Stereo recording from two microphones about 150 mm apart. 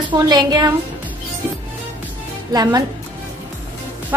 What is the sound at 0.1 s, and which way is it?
Speech, 30° right (ahead or behind).